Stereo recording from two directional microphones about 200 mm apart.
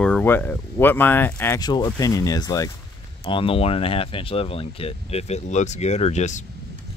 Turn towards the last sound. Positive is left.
turn(degrees=35)  # may be behind; listen again after turning